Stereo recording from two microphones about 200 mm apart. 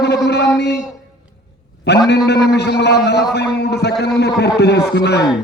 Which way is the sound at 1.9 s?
55° left (ahead or behind).